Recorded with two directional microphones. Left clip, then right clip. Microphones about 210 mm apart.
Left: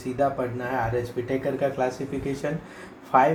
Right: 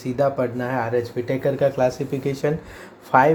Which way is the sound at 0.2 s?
55° right (ahead or behind).